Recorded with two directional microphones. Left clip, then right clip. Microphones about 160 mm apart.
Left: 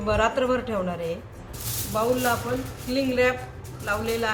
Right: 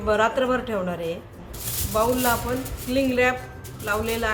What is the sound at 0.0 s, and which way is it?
A woman's voice, 15° right (ahead or behind).